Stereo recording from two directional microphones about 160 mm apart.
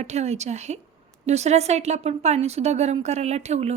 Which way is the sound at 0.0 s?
45° right (ahead or behind).